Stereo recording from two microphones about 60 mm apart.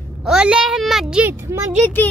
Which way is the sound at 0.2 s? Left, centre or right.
Centre.